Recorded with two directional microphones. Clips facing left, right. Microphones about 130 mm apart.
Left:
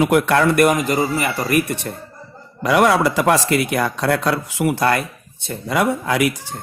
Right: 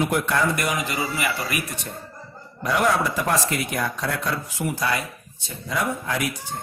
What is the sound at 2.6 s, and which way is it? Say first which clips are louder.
Speech: left 6 dB; 90° left.